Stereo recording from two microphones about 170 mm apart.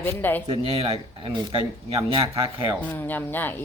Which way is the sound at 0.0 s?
10° left (ahead or behind).